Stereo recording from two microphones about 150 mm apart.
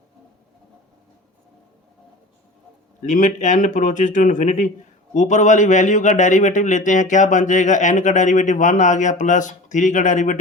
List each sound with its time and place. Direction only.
3.0 s a man's voice: 55° left (ahead or behind)